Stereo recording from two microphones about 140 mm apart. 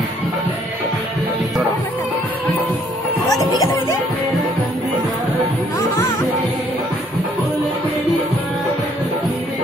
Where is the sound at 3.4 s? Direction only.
25° left (ahead or behind).